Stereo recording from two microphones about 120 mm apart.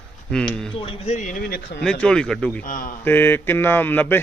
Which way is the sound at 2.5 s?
15° left (ahead or behind).